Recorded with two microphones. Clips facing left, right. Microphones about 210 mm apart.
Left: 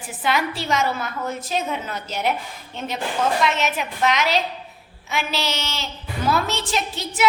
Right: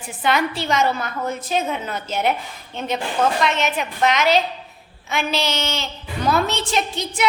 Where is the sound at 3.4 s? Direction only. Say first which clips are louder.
Right 1 dB; centre (ahead or behind).